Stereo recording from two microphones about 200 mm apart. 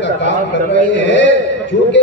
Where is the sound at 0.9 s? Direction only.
60° left (ahead or behind).